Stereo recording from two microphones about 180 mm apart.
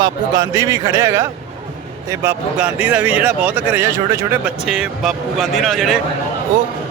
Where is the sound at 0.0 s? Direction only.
20° right (ahead or behind).